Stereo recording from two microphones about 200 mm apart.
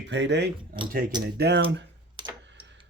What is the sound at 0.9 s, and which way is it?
Speech, 45° right (ahead or behind).